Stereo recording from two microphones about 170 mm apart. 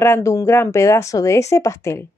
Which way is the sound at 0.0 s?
15° left (ahead or behind).